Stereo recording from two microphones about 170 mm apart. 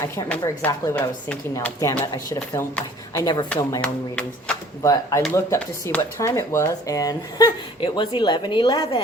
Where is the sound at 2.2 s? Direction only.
20° left (ahead or behind).